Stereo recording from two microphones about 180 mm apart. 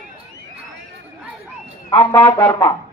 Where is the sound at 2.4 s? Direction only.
20° left (ahead or behind).